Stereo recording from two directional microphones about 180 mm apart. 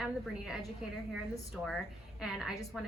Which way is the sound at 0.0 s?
5° right (ahead or behind).